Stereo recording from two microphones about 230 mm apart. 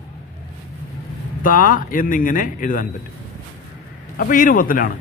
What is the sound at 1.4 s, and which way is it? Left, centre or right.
A man's voice, left.